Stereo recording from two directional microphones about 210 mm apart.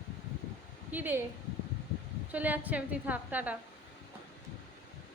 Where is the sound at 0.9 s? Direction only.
10° right (ahead or behind).